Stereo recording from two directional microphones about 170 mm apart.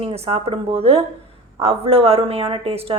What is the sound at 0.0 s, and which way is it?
A woman's voice, 35° right (ahead or behind).